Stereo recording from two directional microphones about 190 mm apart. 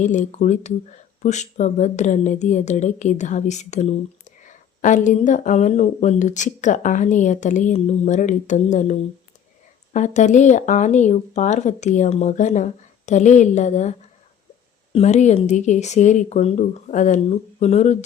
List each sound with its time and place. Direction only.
0.0 s speech: 40° left (ahead or behind)
14.9 s speech: 40° left (ahead or behind)